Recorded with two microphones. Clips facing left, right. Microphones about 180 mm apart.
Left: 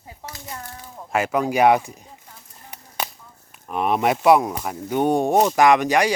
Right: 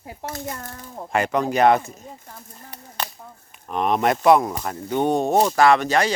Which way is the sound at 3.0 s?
10° left (ahead or behind).